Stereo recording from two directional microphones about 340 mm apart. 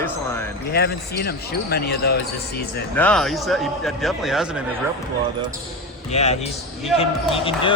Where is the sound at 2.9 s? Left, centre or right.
Centre.